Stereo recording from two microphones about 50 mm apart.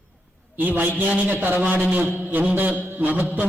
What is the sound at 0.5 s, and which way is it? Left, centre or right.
A man's voice, right.